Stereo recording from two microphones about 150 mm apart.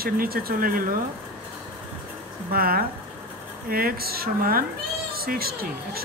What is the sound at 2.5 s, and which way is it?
A woman's voice, 80° right.